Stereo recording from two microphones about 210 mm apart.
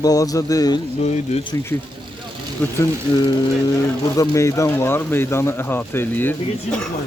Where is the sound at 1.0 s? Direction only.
30° left (ahead or behind).